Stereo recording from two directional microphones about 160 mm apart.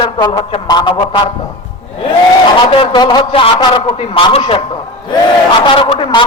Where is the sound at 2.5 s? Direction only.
30° left (ahead or behind).